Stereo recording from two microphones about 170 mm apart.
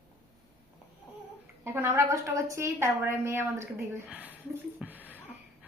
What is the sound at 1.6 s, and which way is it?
A woman's voice, 15° right (ahead or behind).